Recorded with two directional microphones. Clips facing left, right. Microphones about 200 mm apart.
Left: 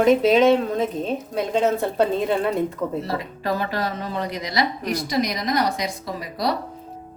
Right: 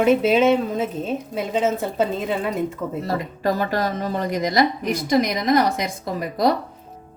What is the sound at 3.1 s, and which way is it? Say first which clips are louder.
A woman's voice: right 3 dB; 45° right (ahead or behind).